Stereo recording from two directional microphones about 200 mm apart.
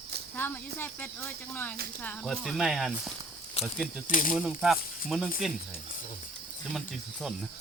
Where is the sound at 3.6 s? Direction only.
30° left (ahead or behind).